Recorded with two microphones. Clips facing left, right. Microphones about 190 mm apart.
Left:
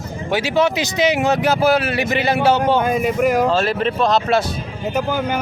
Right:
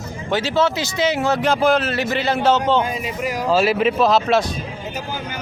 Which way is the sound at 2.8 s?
50° left (ahead or behind).